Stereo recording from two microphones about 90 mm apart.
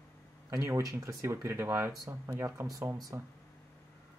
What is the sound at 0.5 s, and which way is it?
Speech, 35° right (ahead or behind).